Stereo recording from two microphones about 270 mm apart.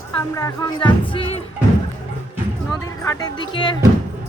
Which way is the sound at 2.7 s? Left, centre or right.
Centre.